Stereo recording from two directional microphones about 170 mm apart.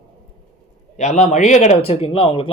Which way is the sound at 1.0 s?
45° left (ahead or behind).